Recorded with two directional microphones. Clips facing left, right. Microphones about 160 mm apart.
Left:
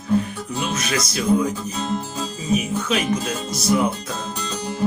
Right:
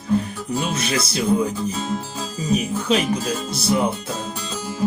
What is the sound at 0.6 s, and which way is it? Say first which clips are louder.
Speech: left 1 dB; 30° right (ahead or behind).